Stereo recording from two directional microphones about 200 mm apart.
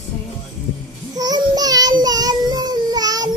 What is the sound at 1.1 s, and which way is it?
Child singing, 20° right (ahead or behind).